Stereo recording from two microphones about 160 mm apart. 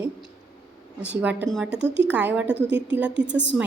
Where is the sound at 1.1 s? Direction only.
10° right (ahead or behind).